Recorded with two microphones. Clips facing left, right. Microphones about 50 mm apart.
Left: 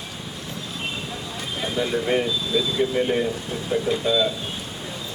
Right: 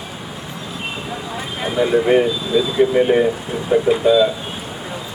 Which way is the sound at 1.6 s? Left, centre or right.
Centre.